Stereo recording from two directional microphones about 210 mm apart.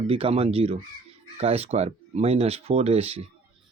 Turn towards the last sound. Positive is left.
turn(degrees=-30)  # may be behind; listen again after turning